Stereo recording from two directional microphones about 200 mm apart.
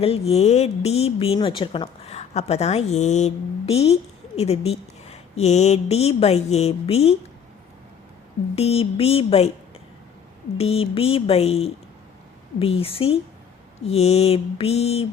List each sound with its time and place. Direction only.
0.0 s speech: 30° left (ahead or behind)
8.5 s speech: 30° left (ahead or behind)
10.6 s speech: 30° left (ahead or behind)